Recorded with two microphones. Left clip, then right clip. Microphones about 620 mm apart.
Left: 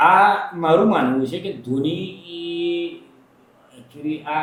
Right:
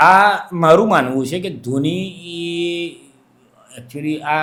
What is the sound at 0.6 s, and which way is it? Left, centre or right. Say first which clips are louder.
Speech: right 7 dB; right.